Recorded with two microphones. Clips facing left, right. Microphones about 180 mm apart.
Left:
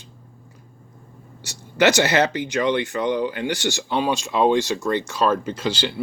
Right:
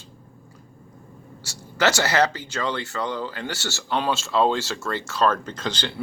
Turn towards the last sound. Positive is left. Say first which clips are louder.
# left 5 dB
turn(degrees=10)  # may be behind; listen again after turning